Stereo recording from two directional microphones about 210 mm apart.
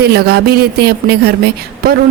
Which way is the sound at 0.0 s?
50° right (ahead or behind).